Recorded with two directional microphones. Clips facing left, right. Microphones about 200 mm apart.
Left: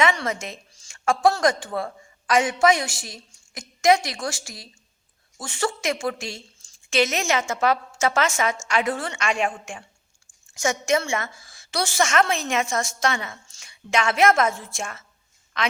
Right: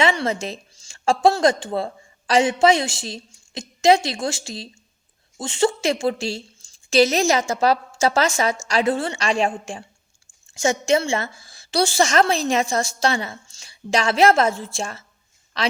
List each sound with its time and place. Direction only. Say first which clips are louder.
0.0 s a woman's voice: right 3 dB; 30° right (ahead or behind)